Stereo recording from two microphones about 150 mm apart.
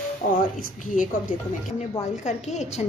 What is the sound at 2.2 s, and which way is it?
Speech, 50° left (ahead or behind).